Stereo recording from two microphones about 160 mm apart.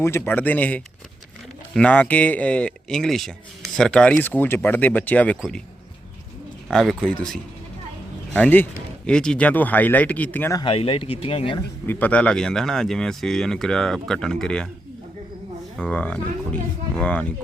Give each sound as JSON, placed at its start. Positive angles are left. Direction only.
{"t": 0.0, "sound": "speech", "side_deg": 15}
{"t": 6.7, "sound": "speech", "side_deg": 0}
{"t": 10.6, "sound": "speech", "side_deg": 35}
{"t": 11.9, "sound": "speech", "side_deg": 10}
{"t": 15.8, "sound": "speech", "side_deg": 10}